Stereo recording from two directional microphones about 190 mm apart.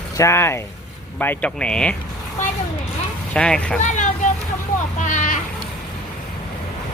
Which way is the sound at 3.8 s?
40° left (ahead or behind).